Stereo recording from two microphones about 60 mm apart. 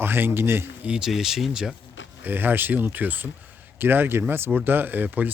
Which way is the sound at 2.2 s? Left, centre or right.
Right.